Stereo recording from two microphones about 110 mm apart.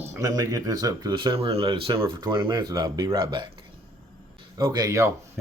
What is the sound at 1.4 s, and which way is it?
Speech, 60° right (ahead or behind).